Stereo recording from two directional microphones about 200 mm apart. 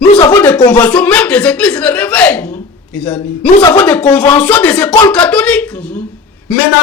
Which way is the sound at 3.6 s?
20° left (ahead or behind).